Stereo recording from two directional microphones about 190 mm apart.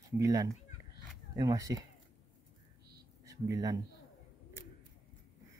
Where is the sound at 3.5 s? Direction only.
20° right (ahead or behind).